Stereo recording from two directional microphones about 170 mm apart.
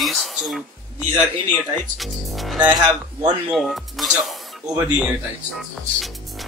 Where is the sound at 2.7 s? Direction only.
25° right (ahead or behind).